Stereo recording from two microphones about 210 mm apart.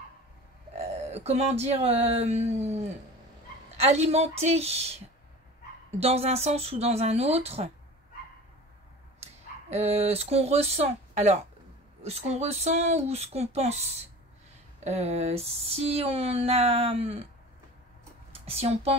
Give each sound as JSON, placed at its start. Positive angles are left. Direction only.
{"t": 0.7, "sound": "speech", "side_deg": -30}
{"t": 3.8, "sound": "speech", "side_deg": -30}
{"t": 5.9, "sound": "speech", "side_deg": -30}
{"t": 9.2, "sound": "speech", "side_deg": -30}
{"t": 18.3, "sound": "speech", "side_deg": -30}